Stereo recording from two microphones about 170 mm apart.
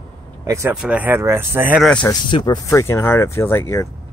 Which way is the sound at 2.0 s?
25° left (ahead or behind).